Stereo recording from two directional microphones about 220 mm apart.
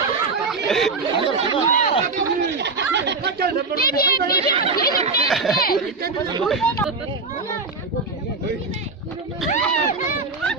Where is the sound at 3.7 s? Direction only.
40° left (ahead or behind).